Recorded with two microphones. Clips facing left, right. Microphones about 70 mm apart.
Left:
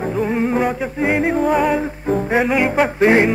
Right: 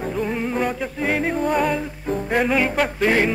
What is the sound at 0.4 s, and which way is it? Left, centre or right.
A capella, centre.